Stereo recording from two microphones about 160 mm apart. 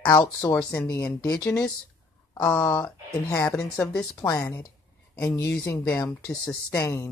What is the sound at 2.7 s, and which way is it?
Speech, 20° left (ahead or behind).